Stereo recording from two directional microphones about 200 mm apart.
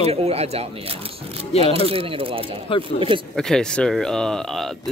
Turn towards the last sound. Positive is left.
turn(degrees=0)  # may be behind; listen again after turning